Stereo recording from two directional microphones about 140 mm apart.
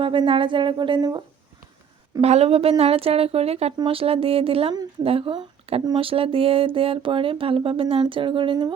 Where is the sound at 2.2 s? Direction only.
50° right (ahead or behind).